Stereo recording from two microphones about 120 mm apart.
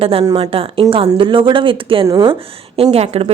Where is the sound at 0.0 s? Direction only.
50° right (ahead or behind).